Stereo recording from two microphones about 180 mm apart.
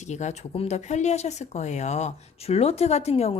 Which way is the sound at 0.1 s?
40° left (ahead or behind).